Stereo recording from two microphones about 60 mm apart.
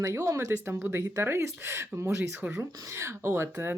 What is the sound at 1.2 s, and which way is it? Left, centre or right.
Speech, right.